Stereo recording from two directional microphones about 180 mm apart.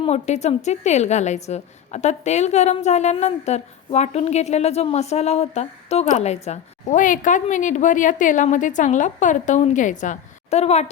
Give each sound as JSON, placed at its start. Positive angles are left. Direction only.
{"t": 0.0, "sound": "a woman's voice", "side_deg": 40}